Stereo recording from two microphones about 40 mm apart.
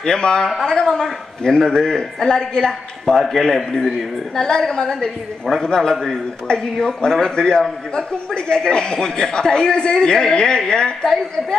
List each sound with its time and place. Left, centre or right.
0.0 s a man's voice: centre
3.2 s a man's voice: centre
4.4 s a man's voice: centre